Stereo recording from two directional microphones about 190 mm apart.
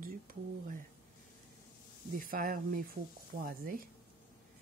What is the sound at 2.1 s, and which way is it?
Speech, 50° right (ahead or behind).